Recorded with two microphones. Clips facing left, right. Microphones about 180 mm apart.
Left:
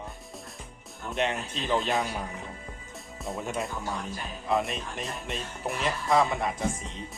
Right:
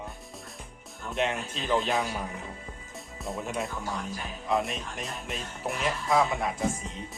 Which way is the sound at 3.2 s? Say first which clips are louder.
Even; centre (ahead or behind).